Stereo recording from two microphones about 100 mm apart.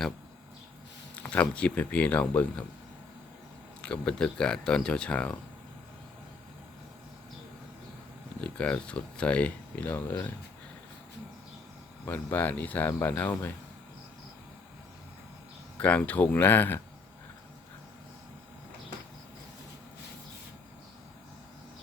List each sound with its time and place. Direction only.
1.1 s speech: 15° left (ahead or behind)
3.8 s speech: 10° left (ahead or behind)
8.4 s speech: 10° left (ahead or behind)
12.0 s speech: 15° left (ahead or behind)
15.8 s speech: 15° left (ahead or behind)